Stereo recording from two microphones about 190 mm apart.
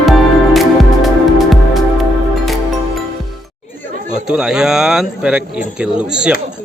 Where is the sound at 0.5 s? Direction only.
Centre (ahead or behind).